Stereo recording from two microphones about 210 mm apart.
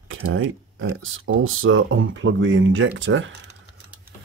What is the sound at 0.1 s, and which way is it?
Speech, 70° right (ahead or behind).